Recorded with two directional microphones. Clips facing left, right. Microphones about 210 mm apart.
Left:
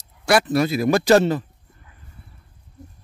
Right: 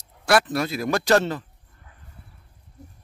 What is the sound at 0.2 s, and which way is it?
Speech, centre (ahead or behind).